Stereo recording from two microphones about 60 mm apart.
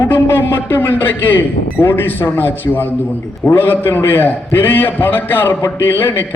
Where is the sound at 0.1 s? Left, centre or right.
Left.